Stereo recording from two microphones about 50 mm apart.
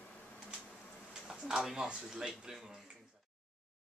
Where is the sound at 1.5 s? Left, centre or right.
Centre.